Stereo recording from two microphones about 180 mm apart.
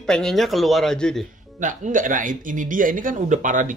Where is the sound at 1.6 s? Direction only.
45° right (ahead or behind).